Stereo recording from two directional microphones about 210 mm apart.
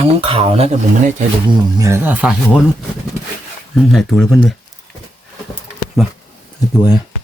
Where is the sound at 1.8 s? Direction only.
10° right (ahead or behind).